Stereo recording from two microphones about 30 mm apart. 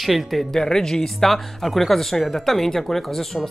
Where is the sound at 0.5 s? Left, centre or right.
Centre.